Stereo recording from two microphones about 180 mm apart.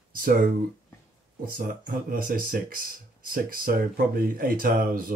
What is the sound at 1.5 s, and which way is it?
Speech, 50° right (ahead or behind).